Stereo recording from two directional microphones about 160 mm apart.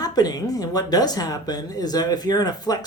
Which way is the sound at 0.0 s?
25° left (ahead or behind).